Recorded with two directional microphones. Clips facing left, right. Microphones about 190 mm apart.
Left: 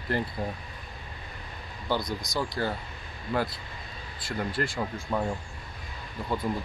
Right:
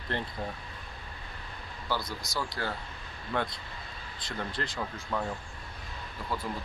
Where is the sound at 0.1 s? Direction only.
5° left (ahead or behind).